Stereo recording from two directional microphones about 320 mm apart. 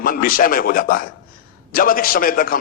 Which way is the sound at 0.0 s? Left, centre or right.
Left.